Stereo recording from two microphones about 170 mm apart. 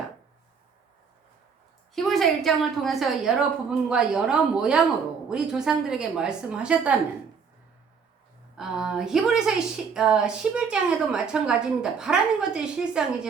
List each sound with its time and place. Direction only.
2.0 s a woman's voice: centre (ahead or behind)
8.5 s a woman's voice: 5° right (ahead or behind)